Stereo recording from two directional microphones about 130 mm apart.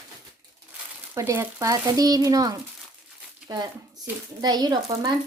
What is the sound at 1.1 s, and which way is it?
Speech, 20° right (ahead or behind).